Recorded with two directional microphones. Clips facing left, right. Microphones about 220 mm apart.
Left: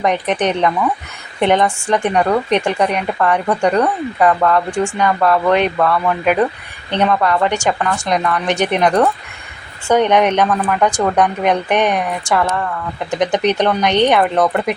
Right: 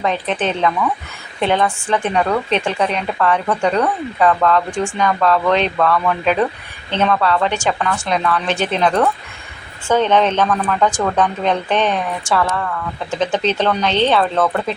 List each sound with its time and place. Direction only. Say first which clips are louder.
0.0 s speech: left 3 dB; 15° left (ahead or behind)